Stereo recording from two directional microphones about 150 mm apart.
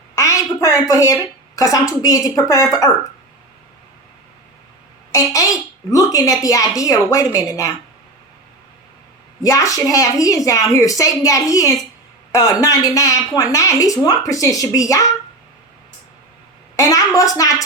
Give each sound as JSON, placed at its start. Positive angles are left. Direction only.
{"t": 0.2, "sound": "a woman's voice", "side_deg": 20}
{"t": 5.1, "sound": "a woman's voice", "side_deg": 20}
{"t": 9.4, "sound": "a woman's voice", "side_deg": 25}
{"t": 16.7, "sound": "a woman's voice", "side_deg": 25}